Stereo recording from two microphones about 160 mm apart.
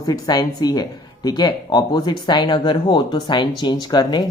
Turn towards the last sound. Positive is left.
turn(degrees=25)  # may be behind; listen again after turning